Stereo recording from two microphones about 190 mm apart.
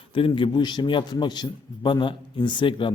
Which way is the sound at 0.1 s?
25° left (ahead or behind).